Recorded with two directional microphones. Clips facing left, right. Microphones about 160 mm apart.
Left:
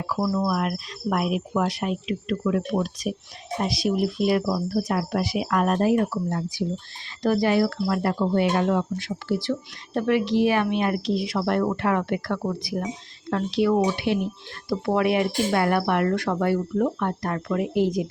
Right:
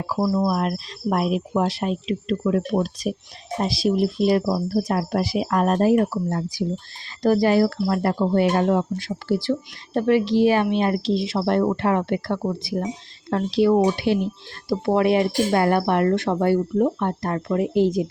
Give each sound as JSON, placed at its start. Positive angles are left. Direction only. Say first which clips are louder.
{"t": 0.2, "sound": "speech", "louder": "right 3 dB", "side_deg": -25}